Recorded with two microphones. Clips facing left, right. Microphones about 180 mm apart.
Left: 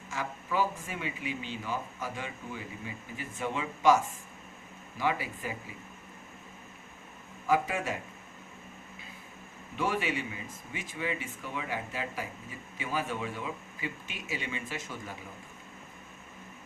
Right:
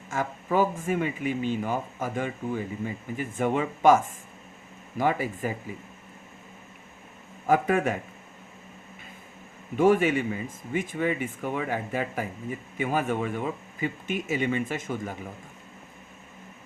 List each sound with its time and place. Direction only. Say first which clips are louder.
0.1 s speech: right 7 dB; 50° right (ahead or behind)
7.4 s speech: right 6 dB; 55° right (ahead or behind)
9.7 s speech: right 11 dB; 50° right (ahead or behind)